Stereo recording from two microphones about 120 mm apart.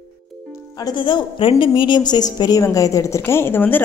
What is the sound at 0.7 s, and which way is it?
A woman's voice, 35° left (ahead or behind).